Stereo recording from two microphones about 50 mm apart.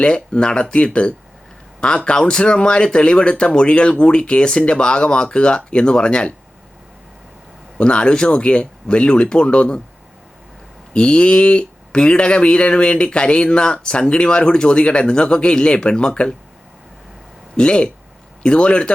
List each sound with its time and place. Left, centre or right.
0.0 s speech: centre
2.0 s speech: centre
7.8 s speech: centre
10.9 s speech: centre
17.6 s speech: centre